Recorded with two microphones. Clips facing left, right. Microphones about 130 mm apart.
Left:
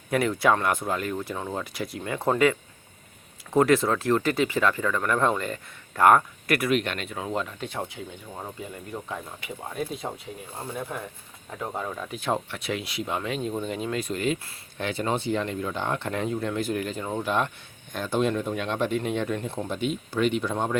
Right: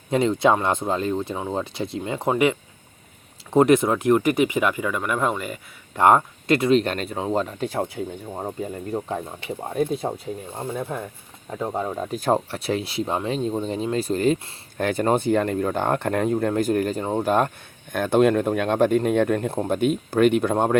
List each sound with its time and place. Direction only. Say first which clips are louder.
0.1 s speech: right 4 dB; 25° right (ahead or behind); by 5.5 s 10° right (ahead or behind)
5.9 s speech: right 2 dB; 25° right (ahead or behind)
14.8 s speech: right 7 dB; 50° right (ahead or behind)
17.9 s speech: right 7 dB; 55° right (ahead or behind)